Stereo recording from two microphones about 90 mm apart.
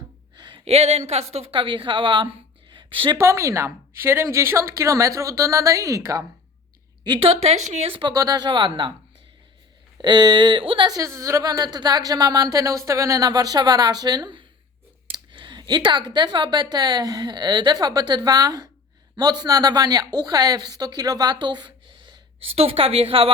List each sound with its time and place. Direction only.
0.3 s a sound: 60° right (ahead or behind)
1.5 s speech: 70° right (ahead or behind)
2.7 s a sound: 65° right (ahead or behind)
3.2 s speech: 30° right (ahead or behind)
7.9 s speech: 70° right (ahead or behind)
8.1 s a woman's voice: 40° right (ahead or behind)
8.4 s speech: 65° right (ahead or behind)
10.0 s speech: 55° right (ahead or behind); by 10.9 s 70° right (ahead or behind)
10.9 s a woman's voice: 40° right (ahead or behind); by 22.2 s 60° right (ahead or behind)
22.6 s a woman's voice: 90° right